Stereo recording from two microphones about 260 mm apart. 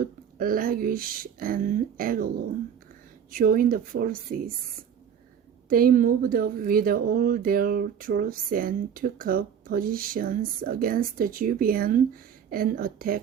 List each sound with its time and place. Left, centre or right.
0.0 s speech: right
3.3 s speech: right
5.6 s speech: right